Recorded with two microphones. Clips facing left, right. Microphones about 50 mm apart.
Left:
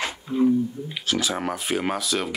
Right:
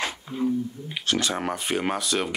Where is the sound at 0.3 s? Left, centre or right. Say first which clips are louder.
Left 7 dB; centre.